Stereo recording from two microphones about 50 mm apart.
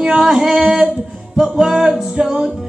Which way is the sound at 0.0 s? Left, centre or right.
Centre.